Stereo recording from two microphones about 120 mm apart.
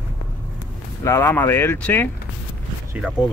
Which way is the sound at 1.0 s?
20° left (ahead or behind).